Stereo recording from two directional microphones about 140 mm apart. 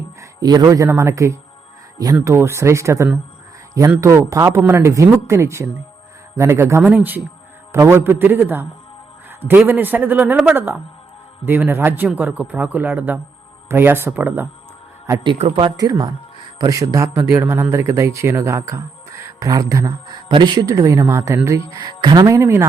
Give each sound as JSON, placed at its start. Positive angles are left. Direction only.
{"t": 0.2, "sound": "speech", "side_deg": -25}
{"t": 15.5, "sound": "speech", "side_deg": -30}
{"t": 22.4, "sound": "speech", "side_deg": -15}